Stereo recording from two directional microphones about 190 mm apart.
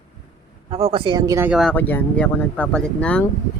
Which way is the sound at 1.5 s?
Centre (ahead or behind).